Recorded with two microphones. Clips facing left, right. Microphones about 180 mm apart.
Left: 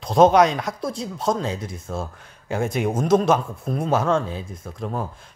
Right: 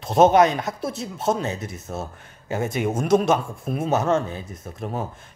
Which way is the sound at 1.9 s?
15° right (ahead or behind).